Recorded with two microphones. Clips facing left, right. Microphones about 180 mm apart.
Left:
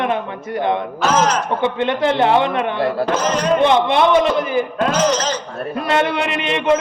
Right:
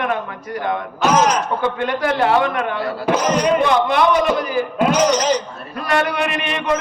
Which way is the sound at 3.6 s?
25° left (ahead or behind).